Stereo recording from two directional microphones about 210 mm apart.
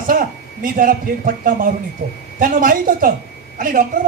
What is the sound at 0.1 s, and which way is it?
A man's voice, 40° right (ahead or behind).